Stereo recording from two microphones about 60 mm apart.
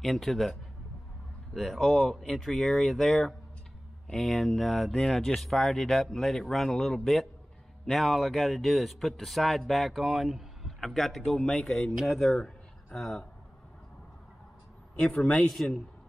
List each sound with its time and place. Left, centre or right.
0.0 s a man's voice: centre
15.4 s a man's voice: centre